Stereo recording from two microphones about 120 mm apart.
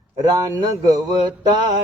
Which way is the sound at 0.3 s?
30° right (ahead or behind).